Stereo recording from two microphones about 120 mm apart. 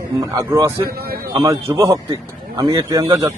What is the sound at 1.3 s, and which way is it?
Speech, 25° right (ahead or behind).